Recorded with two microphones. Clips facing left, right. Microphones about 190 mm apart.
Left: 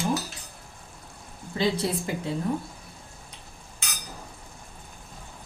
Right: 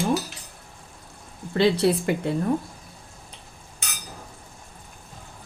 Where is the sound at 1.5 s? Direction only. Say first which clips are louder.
Right 6 dB; 70° right (ahead or behind).